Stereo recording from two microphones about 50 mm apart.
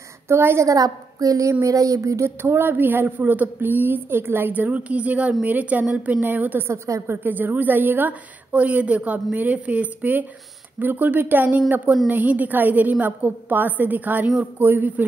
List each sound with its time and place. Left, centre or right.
0.3 s a woman's voice: right
1.4 s speech: right
2.4 s a woman's voice: right
4.5 s a woman's voice: right
6.7 s speech: right
7.2 s a woman's voice: right